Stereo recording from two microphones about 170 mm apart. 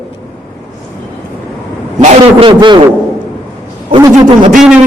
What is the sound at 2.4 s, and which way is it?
Speech, 30° right (ahead or behind).